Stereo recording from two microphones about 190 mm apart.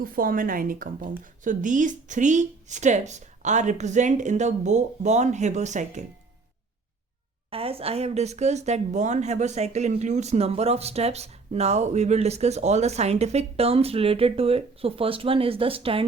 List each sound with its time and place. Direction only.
0.0 s speech: 50° right (ahead or behind)
7.5 s speech: 30° right (ahead or behind)